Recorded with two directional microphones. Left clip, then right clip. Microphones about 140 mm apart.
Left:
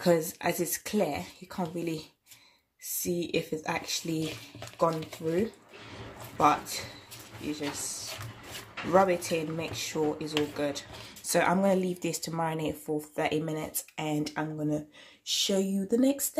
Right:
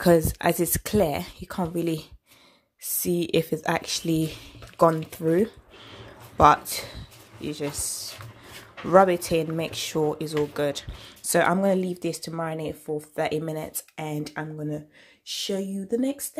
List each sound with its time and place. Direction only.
0.0 s speech: 55° right (ahead or behind)
8.9 s speech: 55° right (ahead or behind); by 14.8 s 30° right (ahead or behind)
15.2 s speech: 15° right (ahead or behind)